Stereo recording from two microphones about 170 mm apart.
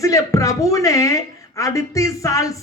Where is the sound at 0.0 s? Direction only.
20° left (ahead or behind).